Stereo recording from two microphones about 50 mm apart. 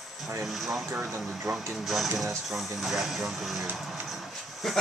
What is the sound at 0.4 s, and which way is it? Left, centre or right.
Speech, centre.